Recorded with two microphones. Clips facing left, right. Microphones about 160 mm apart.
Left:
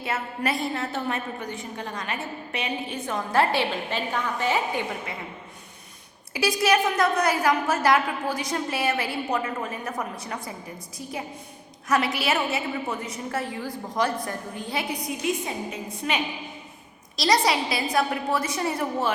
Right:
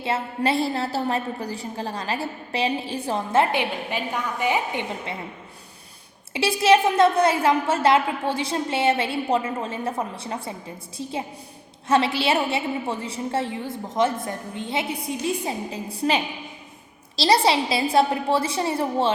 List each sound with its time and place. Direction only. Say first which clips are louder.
0.0 s a woman's voice: right 4 dB; 30° right (ahead or behind)
6.3 s a woman's voice: right 4 dB; 25° right (ahead or behind)